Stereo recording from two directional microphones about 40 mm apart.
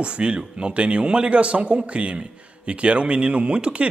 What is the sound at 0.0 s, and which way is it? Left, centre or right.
Speech, right.